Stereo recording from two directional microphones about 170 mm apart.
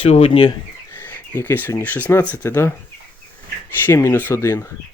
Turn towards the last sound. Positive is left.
turn(degrees=15)  # may be behind; listen again after turning